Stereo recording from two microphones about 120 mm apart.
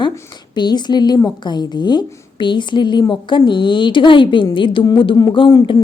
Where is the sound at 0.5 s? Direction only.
35° left (ahead or behind).